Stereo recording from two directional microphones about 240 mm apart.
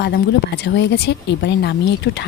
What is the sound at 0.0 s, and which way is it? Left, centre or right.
Speech, left.